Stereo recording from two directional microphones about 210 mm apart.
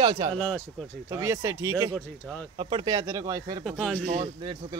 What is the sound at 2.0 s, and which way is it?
Speech, 5° left (ahead or behind).